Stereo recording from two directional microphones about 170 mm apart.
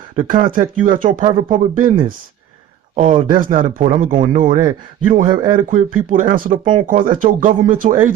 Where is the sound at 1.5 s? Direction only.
50° right (ahead or behind).